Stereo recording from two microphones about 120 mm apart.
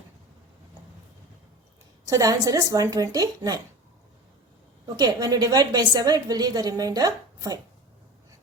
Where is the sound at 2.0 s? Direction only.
30° right (ahead or behind).